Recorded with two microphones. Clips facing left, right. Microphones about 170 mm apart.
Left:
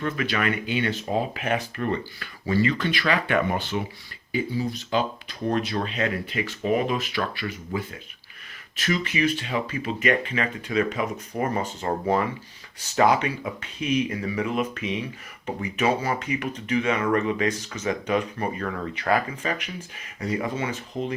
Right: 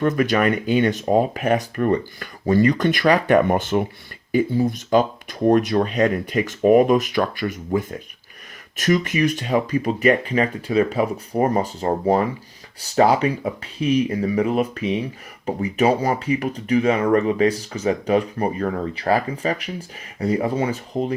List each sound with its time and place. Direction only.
0.0 s speech: 45° right (ahead or behind)